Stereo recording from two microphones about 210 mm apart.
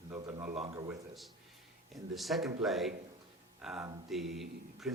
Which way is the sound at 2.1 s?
Centre (ahead or behind).